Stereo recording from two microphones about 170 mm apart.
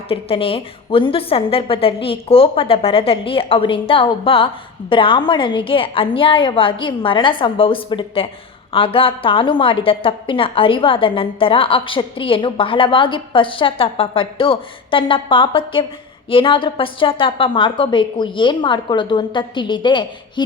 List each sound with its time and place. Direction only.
0.1 s a woman's voice: 35° left (ahead or behind)